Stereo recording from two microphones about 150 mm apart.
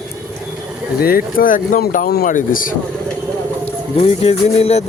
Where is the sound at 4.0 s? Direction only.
45° left (ahead or behind).